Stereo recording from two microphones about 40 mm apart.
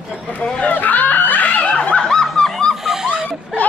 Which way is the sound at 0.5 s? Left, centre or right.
Left.